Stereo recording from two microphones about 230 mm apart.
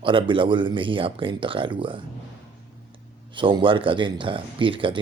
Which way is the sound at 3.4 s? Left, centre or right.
Right.